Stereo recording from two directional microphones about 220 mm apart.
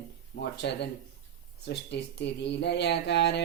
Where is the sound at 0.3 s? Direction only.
50° left (ahead or behind).